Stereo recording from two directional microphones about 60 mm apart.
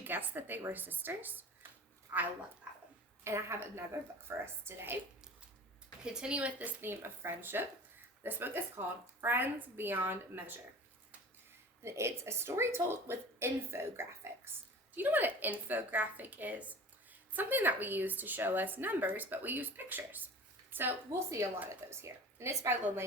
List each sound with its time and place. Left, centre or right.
0.0 s a woman's voice: right
2.1 s a woman's voice: right
3.2 s a woman's voice: right
6.0 s a woman's voice: centre
6.8 s a woman's voice: right
11.8 s a woman's voice: right
14.9 s a woman's voice: right
21.1 s a woman's voice: right